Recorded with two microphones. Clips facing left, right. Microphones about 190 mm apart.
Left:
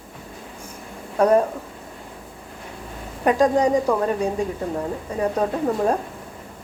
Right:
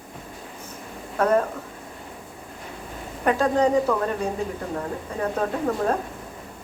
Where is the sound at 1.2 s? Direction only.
15° left (ahead or behind).